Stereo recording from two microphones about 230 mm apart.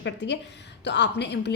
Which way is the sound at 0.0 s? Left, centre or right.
Left.